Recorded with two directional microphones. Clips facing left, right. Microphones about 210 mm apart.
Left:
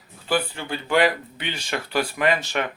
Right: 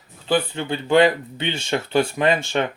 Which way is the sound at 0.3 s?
25° right (ahead or behind).